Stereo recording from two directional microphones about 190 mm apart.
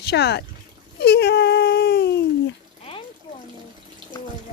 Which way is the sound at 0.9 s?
60° left (ahead or behind).